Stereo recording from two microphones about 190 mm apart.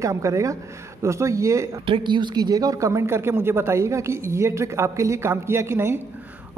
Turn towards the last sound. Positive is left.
turn(degrees=-15)  # may be behind; listen again after turning